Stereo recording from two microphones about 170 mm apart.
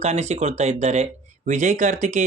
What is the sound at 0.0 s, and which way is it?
Speech, 40° right (ahead or behind).